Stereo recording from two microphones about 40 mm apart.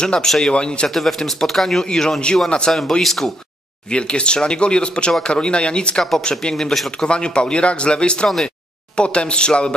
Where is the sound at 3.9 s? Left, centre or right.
Left.